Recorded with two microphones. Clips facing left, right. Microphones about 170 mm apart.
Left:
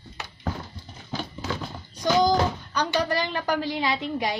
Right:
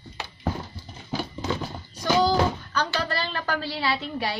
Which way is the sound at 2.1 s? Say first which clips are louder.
Even; 15° left (ahead or behind).